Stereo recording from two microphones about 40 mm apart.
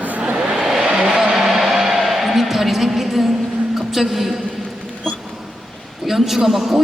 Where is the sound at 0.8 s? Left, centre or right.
Right.